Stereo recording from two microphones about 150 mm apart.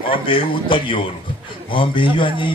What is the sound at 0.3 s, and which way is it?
A man's voice, 35° left (ahead or behind).